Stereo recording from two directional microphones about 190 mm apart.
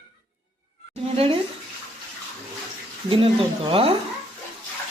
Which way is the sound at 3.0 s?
30° right (ahead or behind).